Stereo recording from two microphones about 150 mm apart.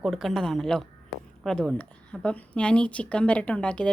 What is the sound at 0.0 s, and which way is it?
A woman's voice, centre (ahead or behind).